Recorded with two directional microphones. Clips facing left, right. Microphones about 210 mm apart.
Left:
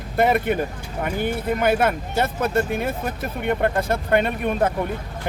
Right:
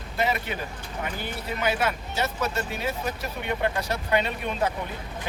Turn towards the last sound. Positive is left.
turn(degrees=55)  # may be behind; listen again after turning